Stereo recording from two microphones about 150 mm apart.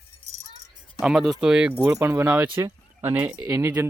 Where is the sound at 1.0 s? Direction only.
Centre (ahead or behind).